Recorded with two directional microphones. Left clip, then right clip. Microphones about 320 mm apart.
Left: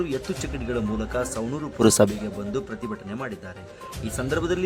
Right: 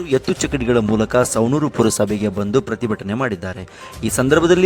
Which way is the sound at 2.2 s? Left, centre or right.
Right.